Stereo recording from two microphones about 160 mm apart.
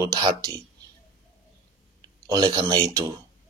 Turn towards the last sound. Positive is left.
turn(degrees=-20)  # may be behind; listen again after turning